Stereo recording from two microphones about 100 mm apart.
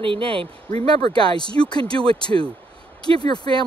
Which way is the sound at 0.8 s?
50° left (ahead or behind).